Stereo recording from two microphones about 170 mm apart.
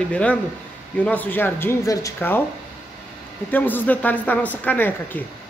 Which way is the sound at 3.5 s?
10° left (ahead or behind).